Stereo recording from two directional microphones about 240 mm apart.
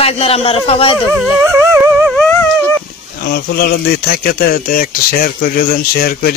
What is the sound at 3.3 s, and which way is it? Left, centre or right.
Speech, left.